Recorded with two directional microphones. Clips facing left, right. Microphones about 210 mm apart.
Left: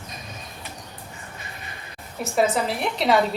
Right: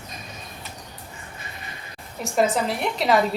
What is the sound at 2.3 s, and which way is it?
Speech, centre (ahead or behind).